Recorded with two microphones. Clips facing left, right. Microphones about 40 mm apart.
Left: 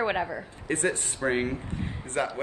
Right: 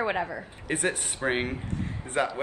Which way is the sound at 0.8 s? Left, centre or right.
Right.